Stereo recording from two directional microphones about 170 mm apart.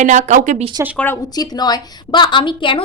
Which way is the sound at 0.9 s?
10° left (ahead or behind).